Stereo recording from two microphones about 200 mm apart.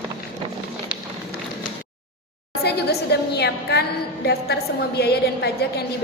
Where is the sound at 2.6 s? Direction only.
55° left (ahead or behind).